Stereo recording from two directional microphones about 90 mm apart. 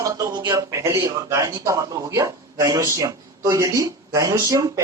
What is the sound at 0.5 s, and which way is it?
A man's voice, 35° right (ahead or behind).